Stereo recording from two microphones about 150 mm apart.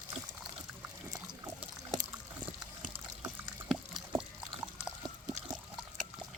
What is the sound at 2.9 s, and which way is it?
Water, 15° right (ahead or behind).